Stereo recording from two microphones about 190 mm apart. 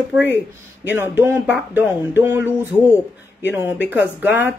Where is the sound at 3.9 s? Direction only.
10° right (ahead or behind).